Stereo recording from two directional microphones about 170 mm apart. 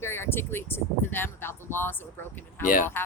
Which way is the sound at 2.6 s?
50° left (ahead or behind).